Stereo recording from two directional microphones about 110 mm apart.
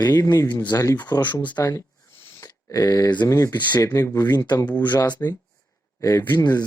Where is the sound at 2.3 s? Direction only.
30° left (ahead or behind).